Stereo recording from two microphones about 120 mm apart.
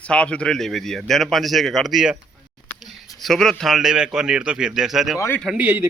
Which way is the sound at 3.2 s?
Centre (ahead or behind).